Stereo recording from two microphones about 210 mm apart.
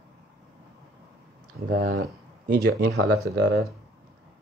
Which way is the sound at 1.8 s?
45° right (ahead or behind).